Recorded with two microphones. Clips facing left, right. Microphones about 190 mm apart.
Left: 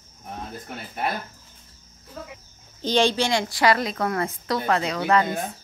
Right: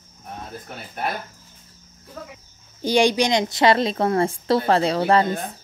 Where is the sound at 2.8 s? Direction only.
10° right (ahead or behind); by 5.3 s 30° right (ahead or behind).